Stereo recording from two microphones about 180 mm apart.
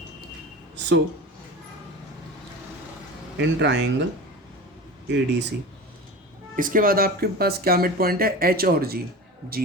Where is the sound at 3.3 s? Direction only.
75° right (ahead or behind).